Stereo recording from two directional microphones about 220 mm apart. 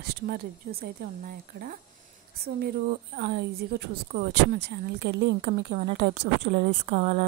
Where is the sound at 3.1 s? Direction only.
45° right (ahead or behind).